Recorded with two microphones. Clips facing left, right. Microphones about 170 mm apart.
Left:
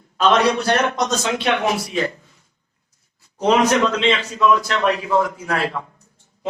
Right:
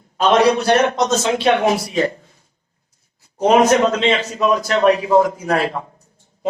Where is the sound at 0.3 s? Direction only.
25° right (ahead or behind).